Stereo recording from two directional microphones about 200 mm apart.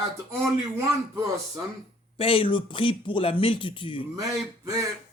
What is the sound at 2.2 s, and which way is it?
Speech, 25° left (ahead or behind).